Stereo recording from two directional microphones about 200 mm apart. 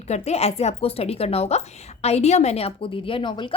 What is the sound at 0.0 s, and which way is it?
A woman's voice, 35° left (ahead or behind).